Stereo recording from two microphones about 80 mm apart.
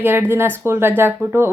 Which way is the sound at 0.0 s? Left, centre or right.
Right.